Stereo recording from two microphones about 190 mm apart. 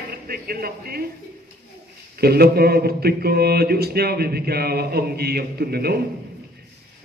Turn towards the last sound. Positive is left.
turn(degrees=-55)  # may be behind; listen again after turning